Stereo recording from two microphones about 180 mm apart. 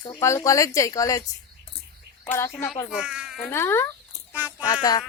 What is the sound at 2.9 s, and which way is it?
Speech, 5° right (ahead or behind).